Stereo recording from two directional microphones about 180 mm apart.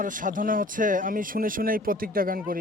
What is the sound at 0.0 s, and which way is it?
Speech, 45° right (ahead or behind).